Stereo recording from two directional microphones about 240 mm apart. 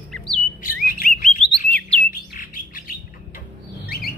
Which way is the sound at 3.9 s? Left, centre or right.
Left.